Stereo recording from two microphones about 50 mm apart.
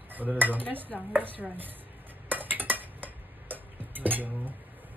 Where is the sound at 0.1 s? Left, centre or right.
Right.